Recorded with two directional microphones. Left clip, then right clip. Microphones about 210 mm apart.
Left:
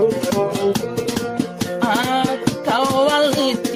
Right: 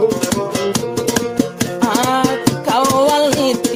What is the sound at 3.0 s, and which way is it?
Music, 40° right (ahead or behind).